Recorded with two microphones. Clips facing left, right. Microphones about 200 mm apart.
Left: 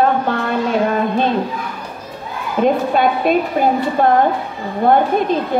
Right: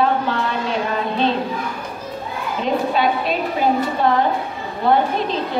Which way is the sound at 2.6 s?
50° left (ahead or behind).